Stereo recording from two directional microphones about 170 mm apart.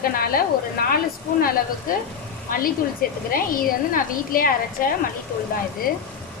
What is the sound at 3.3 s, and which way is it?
Speech, 60° left (ahead or behind).